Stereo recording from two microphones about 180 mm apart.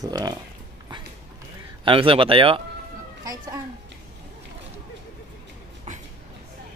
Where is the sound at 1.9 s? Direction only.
30° right (ahead or behind).